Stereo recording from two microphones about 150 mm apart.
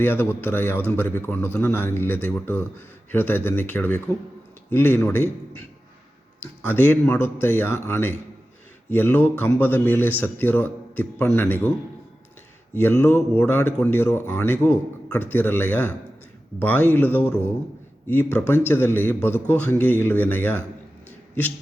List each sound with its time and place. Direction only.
0.0 s speech: 15° left (ahead or behind)
6.4 s speech: 15° left (ahead or behind)
12.7 s speech: 15° left (ahead or behind)